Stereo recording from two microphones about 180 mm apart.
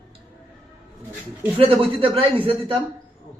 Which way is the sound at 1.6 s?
30° right (ahead or behind).